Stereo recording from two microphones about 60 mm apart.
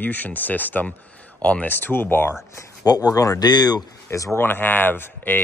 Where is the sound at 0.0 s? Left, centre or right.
Left.